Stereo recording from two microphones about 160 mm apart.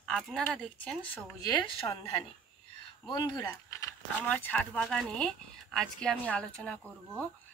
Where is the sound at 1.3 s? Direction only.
25° left (ahead or behind).